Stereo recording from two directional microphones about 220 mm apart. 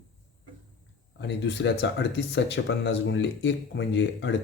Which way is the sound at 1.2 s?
50° left (ahead or behind).